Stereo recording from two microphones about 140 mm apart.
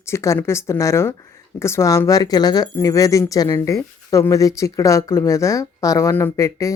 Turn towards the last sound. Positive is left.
turn(degrees=20)  # may be behind; listen again after turning